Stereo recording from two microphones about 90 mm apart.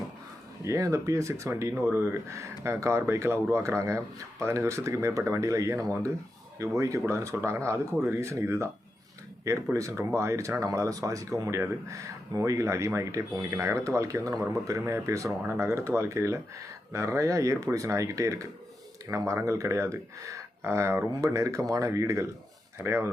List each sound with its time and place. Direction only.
0.6 s speech: 35° right (ahead or behind)
9.7 s speech: 35° right (ahead or behind)